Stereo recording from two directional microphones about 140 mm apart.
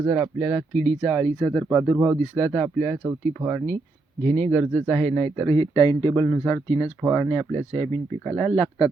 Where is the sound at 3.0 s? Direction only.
20° right (ahead or behind).